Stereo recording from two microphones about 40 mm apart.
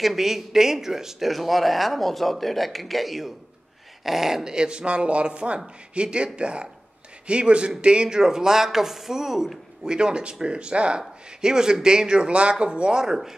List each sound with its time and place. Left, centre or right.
0.0 s speech: centre
4.5 s speech: right
9.8 s speech: right
13.0 s speech: centre